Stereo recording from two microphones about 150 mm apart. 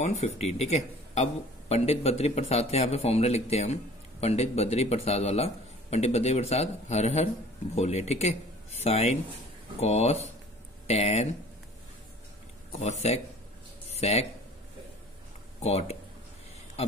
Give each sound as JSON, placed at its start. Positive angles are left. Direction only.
{"t": 0.0, "sound": "speech", "side_deg": 45}
{"t": 12.7, "sound": "speech", "side_deg": 50}
{"t": 15.6, "sound": "speech", "side_deg": 45}